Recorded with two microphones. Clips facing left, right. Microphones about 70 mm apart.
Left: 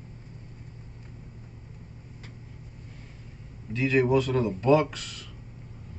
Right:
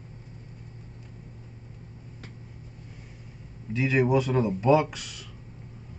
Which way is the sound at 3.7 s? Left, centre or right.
Centre.